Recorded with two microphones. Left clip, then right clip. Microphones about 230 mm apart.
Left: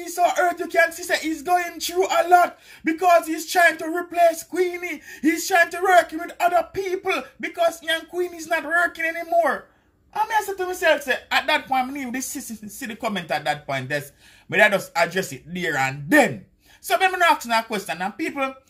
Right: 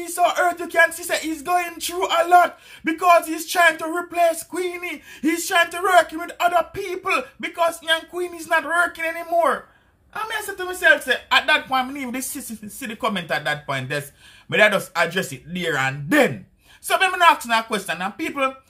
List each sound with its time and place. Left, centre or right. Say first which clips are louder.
0.0 s speech: right 1 dB; centre